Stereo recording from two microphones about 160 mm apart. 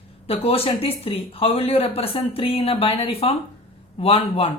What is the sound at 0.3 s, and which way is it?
Speech, 40° left (ahead or behind).